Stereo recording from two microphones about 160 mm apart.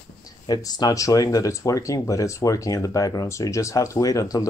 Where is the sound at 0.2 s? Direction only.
25° left (ahead or behind).